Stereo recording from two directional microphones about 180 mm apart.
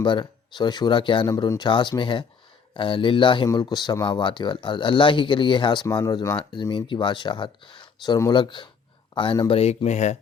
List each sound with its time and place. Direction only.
0.0 s speech: 25° left (ahead or behind)